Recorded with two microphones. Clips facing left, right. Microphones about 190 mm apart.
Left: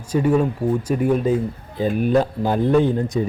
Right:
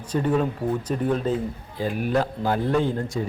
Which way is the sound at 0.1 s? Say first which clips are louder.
Left 5 dB; 10° left (ahead or behind).